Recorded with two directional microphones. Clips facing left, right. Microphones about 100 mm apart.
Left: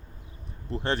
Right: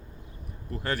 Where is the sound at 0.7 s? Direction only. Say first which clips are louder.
Left 3 dB; 25° left (ahead or behind).